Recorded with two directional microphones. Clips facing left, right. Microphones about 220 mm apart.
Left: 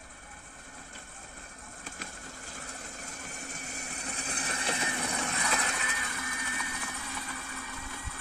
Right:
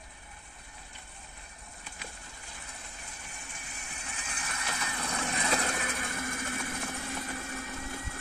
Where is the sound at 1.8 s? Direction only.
45° left (ahead or behind).